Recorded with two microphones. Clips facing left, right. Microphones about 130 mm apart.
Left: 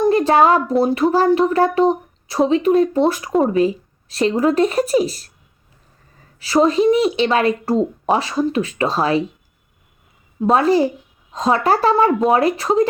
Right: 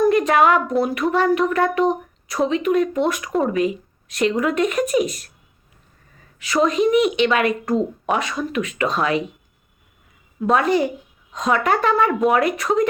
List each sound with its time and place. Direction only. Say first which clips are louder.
0.0 s a sound: left 2 dB; 30° left (ahead or behind)
0.8 s speech: left 4 dB; 30° left (ahead or behind)
6.4 s speech: left 3 dB; 35° left (ahead or behind)
10.5 s speech: left 3 dB; 30° left (ahead or behind)